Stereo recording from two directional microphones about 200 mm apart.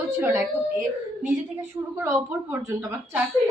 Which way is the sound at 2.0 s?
15° right (ahead or behind).